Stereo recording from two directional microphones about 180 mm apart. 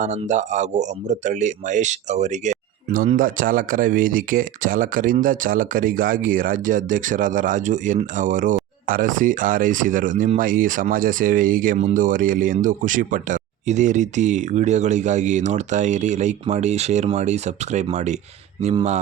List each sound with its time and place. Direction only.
0.0 s speech: 40° right (ahead or behind)